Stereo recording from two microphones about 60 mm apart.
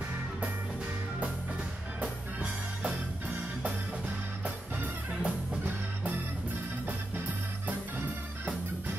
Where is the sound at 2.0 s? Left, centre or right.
Centre.